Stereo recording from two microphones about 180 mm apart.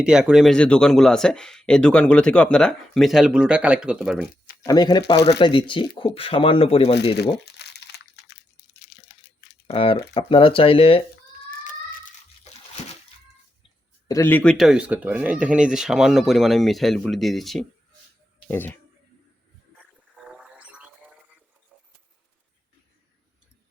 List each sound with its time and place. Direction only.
0.0 s speech: 5° right (ahead or behind)
4.6 s speech: 20° left (ahead or behind)
7.6 s crunch: 70° left (ahead or behind)
9.6 s speech: 30° left (ahead or behind)
11.6 s crumpling: 45° left (ahead or behind)
14.1 s speech: 15° left (ahead or behind)
14.5 s speech: centre (ahead or behind)
18.4 s speech: 10° left (ahead or behind)
20.3 s a sound: 5° right (ahead or behind)